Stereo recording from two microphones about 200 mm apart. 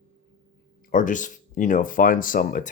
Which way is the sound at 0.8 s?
40° left (ahead or behind).